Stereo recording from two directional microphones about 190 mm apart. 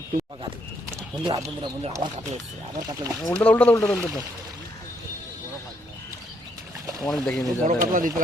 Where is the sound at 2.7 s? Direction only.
15° right (ahead or behind).